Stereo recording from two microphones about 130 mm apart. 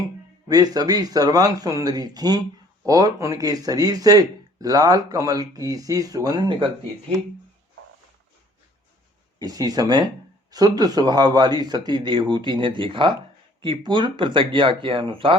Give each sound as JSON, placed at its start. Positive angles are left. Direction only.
{"t": 0.4, "sound": "speech", "side_deg": -30}
{"t": 9.4, "sound": "speech", "side_deg": -30}